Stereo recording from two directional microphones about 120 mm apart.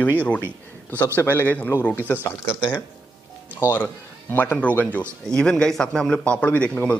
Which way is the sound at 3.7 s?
15° left (ahead or behind).